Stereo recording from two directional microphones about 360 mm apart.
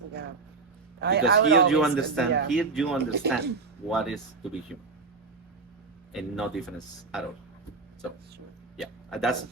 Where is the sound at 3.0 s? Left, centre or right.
Right.